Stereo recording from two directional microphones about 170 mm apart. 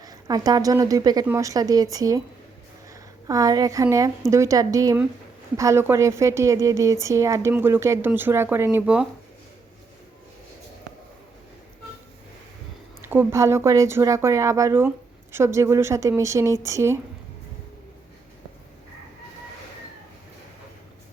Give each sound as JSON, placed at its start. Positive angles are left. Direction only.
{"t": 0.0, "sound": "a woman's voice", "side_deg": -20}
{"t": 13.0, "sound": "speech", "side_deg": -10}